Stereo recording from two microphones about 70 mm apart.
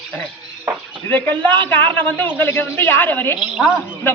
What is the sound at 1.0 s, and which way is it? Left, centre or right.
A man's voice, left.